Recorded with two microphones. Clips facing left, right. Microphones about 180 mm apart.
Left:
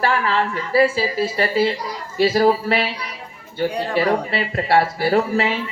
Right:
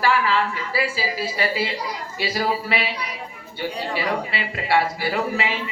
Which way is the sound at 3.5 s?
55° left (ahead or behind).